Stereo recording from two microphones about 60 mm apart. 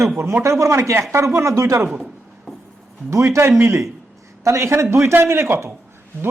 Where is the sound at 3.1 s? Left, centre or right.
Right.